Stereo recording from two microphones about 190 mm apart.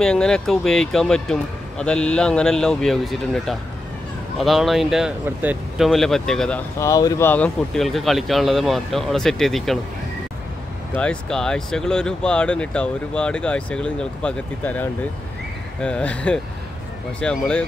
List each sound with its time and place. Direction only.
0.0 s speech: 5° left (ahead or behind)
6.8 s speech: 20° left (ahead or behind); by 9.8 s centre (ahead or behind)
11.0 s speech: 5° left (ahead or behind)